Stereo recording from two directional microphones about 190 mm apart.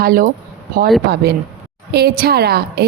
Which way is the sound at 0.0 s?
50° right (ahead or behind).